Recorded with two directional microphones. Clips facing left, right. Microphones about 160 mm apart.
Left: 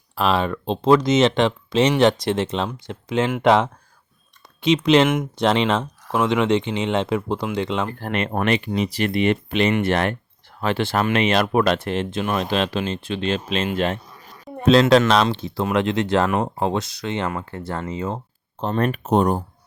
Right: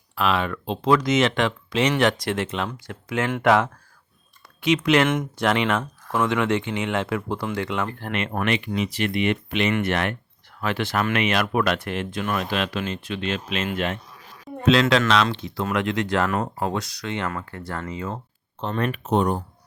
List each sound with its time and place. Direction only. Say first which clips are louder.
0.2 s speech: left 3 dB; 35° left (ahead or behind)
5.0 s speech: left 2 dB; 10° left (ahead or behind)
5.4 s speech: left 3 dB; 25° left (ahead or behind)
7.9 s speech: left 3 dB; 35° left (ahead or behind)
18.6 s speech: left 4 dB; 40° left (ahead or behind)